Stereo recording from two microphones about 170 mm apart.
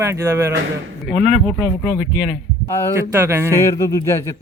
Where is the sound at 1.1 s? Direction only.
45° right (ahead or behind).